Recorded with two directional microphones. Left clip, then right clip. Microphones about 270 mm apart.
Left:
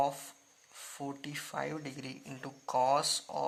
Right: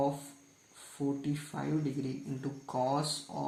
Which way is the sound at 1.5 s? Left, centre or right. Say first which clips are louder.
Right 2 dB; left.